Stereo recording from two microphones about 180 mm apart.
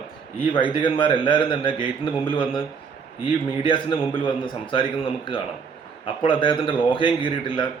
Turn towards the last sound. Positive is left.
turn(degrees=30)  # may be behind; listen again after turning